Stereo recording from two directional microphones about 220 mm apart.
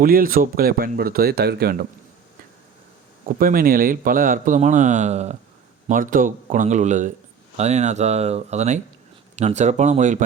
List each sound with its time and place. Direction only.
0.0 s speech: 40° right (ahead or behind)
3.2 s speech: 40° right (ahead or behind)